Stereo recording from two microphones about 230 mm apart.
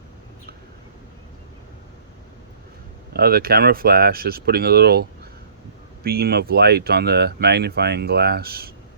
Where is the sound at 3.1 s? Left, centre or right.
Right.